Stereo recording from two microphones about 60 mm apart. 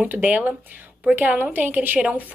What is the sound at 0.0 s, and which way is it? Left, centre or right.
A woman's voice, right.